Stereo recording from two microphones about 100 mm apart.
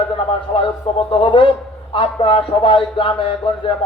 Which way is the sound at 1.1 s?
60° left (ahead or behind).